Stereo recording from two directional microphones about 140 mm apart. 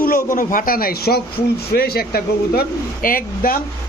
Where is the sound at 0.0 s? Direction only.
75° left (ahead or behind).